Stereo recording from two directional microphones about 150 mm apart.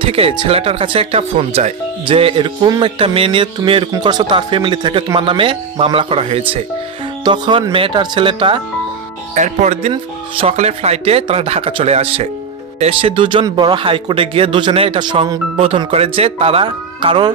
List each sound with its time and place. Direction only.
0.0 s speech: 40° right (ahead or behind)
9.3 s speech: 50° right (ahead or behind); by 15.3 s 30° right (ahead or behind)
15.5 s speech: 40° right (ahead or behind)